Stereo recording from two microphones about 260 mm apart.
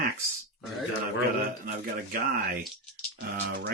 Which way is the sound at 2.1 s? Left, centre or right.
Right.